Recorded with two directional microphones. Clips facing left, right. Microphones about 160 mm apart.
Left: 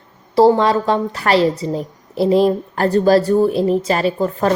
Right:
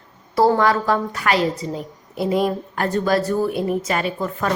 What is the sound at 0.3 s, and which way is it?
A woman's voice, 25° left (ahead or behind).